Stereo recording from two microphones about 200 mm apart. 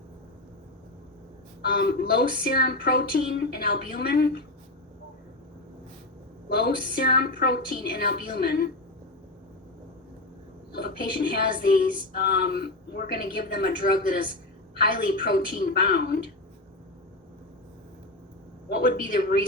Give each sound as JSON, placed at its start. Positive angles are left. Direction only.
{"t": 1.6, "sound": "speech", "side_deg": 50}
{"t": 6.5, "sound": "speech", "side_deg": 50}
{"t": 10.8, "sound": "speech", "side_deg": 50}
{"t": 18.7, "sound": "speech", "side_deg": 45}